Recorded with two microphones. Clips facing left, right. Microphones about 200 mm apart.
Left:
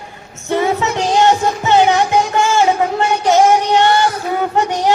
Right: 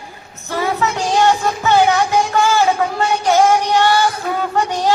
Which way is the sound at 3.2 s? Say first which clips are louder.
Left 2 dB; 20° left (ahead or behind).